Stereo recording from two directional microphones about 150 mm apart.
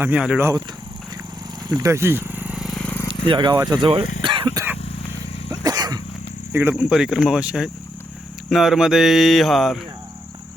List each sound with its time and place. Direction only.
0.0 s speech: 10° right (ahead or behind)
1.7 s a sound: 20° right (ahead or behind); by 3.0 s 5° left (ahead or behind)
3.2 s speech: 30° right (ahead or behind)
3.5 s speech: 20° right (ahead or behind)
3.8 s speech: 35° right (ahead or behind)
4.2 s throat clearing: 35° right (ahead or behind)
5.5 s sneeze: 25° right (ahead or behind)
6.5 s speech: 15° right (ahead or behind)
6.8 s speech: 5° right (ahead or behind)